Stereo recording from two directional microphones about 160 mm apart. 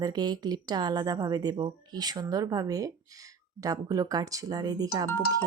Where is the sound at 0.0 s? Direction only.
25° right (ahead or behind).